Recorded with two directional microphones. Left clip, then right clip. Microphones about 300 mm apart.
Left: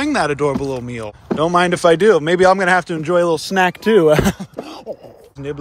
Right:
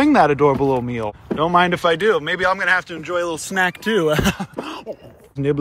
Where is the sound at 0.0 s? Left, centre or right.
Centre.